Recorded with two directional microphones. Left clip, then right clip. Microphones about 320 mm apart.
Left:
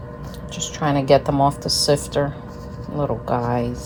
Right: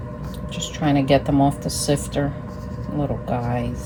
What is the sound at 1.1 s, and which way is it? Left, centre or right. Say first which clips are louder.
Speech: left 4 dB; centre.